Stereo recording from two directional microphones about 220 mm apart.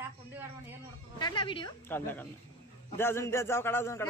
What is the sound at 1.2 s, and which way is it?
Speech, 20° left (ahead or behind).